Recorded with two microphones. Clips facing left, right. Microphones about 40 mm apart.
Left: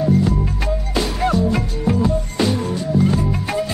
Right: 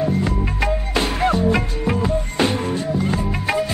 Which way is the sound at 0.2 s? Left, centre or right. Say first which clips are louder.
Left 1 dB; right.